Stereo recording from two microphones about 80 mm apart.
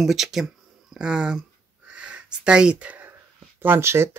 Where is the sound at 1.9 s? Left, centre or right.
Centre.